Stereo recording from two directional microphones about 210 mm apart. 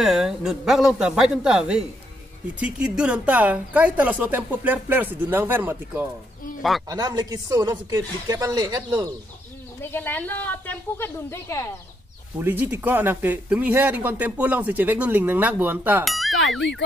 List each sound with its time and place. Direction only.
0.0 s speech: centre (ahead or behind)
9.8 s speech: 10° left (ahead or behind)
12.4 s speech: 10° right (ahead or behind)